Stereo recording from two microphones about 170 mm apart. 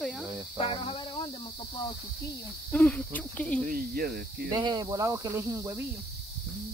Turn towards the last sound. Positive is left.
turn(degrees=-20)  # may be behind; listen again after turning